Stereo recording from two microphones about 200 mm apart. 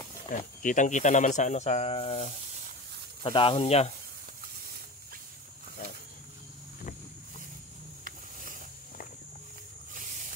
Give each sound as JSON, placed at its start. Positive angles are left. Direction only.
{"t": 0.3, "sound": "speech", "side_deg": 40}